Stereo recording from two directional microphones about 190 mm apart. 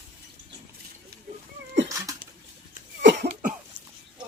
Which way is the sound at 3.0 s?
65° right (ahead or behind).